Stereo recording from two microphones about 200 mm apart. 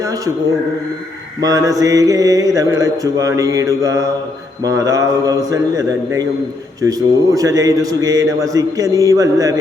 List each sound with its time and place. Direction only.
1.4 s speech: 15° right (ahead or behind)